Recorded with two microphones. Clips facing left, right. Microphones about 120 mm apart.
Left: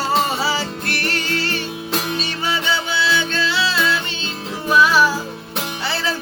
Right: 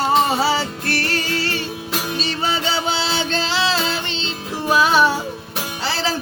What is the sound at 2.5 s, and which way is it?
Music, 35° right (ahead or behind).